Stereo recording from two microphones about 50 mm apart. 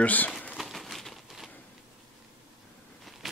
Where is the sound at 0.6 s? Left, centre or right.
Centre.